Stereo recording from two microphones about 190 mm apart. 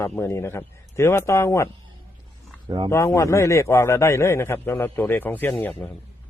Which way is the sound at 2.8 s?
15° left (ahead or behind).